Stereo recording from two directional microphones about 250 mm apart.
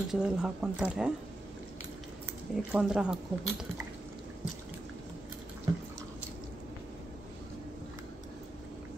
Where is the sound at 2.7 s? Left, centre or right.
Centre.